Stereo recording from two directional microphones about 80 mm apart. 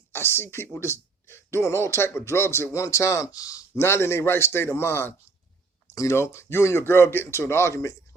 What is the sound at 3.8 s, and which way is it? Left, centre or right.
Speech, left.